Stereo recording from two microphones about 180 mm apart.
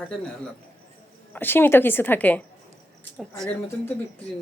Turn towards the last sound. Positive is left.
turn(degrees=0)  # may be behind; listen again after turning